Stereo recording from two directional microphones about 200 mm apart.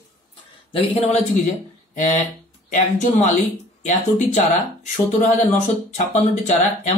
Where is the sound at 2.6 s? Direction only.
35° left (ahead or behind).